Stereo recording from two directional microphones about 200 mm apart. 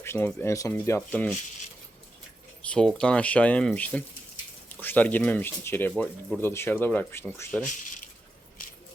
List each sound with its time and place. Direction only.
0.0 s speech: 10° left (ahead or behind)
2.6 s speech: 5° left (ahead or behind)
7.6 s speech: 40° left (ahead or behind)